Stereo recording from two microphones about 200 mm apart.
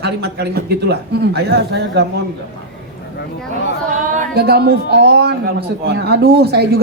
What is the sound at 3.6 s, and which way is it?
A man's voice, 40° right (ahead or behind).